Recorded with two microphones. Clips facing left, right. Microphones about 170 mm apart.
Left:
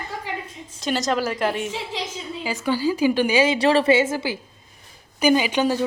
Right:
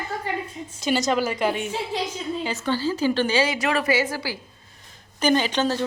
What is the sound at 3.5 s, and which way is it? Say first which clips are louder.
Speech: left 5 dB; 30° left (ahead or behind).